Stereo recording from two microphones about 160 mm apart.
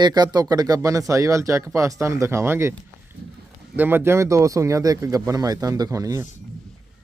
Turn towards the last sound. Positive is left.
turn(degrees=-20)  # may be behind; listen again after turning